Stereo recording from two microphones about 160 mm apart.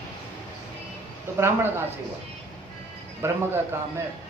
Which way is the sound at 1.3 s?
15° right (ahead or behind).